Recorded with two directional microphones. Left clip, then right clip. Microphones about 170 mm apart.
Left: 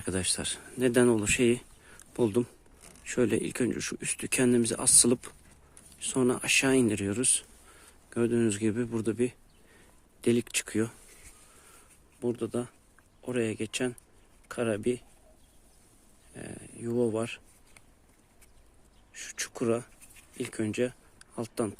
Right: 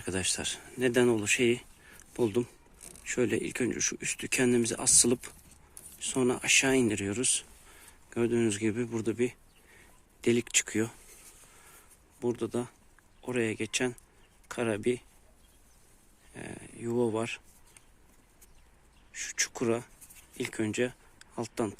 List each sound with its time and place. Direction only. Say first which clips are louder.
0.0 s speech: even; 30° left (ahead or behind)
12.2 s speech: even; 20° left (ahead or behind)
16.3 s speech: even; 20° left (ahead or behind)
19.1 s speech: right 5 dB; 25° left (ahead or behind)